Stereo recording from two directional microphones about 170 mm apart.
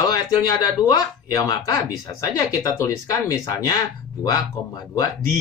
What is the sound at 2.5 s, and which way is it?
Speech, 20° left (ahead or behind).